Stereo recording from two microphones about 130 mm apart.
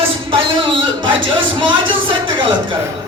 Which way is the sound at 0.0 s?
45° right (ahead or behind).